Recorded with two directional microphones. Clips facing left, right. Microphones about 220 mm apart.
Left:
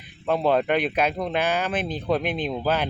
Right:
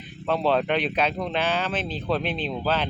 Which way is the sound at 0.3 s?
10° left (ahead or behind).